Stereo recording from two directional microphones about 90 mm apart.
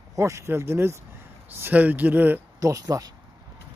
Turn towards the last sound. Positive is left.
turn(degrees=-45)  # may be behind; listen again after turning